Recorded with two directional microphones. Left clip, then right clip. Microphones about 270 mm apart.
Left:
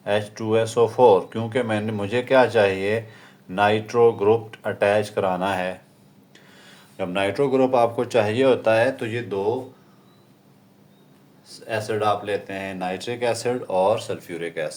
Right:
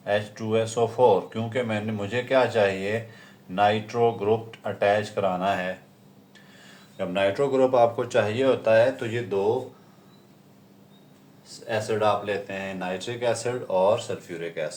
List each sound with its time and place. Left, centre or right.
0.0 s speech: left
11.4 s speech: left